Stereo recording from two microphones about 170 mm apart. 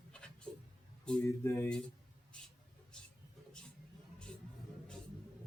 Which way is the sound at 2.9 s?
5° left (ahead or behind).